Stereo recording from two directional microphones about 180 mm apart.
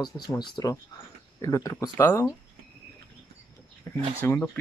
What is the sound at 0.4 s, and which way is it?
Speech, 25° left (ahead or behind).